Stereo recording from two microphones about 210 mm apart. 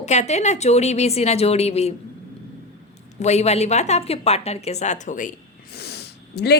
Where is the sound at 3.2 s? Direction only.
30° left (ahead or behind).